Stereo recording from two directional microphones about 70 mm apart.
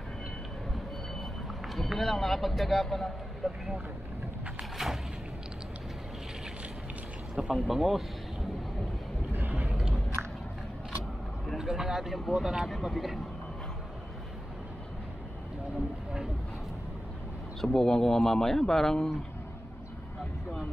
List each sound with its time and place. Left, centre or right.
1.7 s speech: centre
4.6 s a sound: centre
7.5 s speech: centre
9.3 s vehicle: right
9.7 s biting: centre
10.2 s biting: centre
11.5 s speech: centre
17.6 s speech: centre